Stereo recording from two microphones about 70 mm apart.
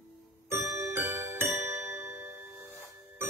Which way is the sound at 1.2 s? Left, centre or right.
Right.